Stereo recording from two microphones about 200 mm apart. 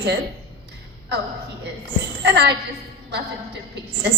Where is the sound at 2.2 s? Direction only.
55° right (ahead or behind).